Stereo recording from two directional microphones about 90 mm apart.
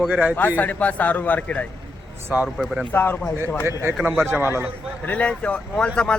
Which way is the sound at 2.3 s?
15° right (ahead or behind).